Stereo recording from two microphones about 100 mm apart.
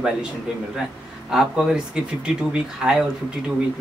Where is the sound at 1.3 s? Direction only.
5° right (ahead or behind).